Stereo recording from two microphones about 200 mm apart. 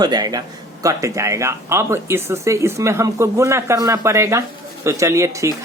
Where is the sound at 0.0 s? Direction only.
20° right (ahead or behind).